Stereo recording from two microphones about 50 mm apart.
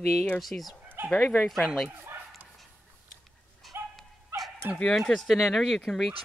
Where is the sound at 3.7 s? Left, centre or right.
Right.